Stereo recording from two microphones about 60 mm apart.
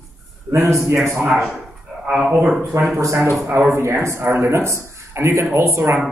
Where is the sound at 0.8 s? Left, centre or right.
Right.